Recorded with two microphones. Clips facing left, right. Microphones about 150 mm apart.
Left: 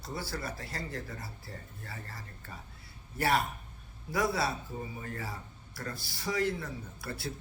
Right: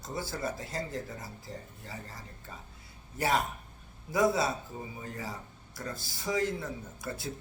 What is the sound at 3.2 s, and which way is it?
A man's voice, 20° right (ahead or behind).